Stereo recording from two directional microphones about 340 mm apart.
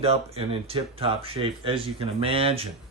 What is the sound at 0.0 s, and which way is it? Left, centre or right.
Speech, centre.